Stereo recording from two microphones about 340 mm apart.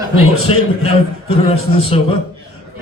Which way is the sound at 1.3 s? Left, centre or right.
Centre.